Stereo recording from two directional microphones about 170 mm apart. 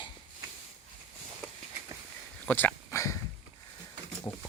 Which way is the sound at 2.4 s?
10° left (ahead or behind).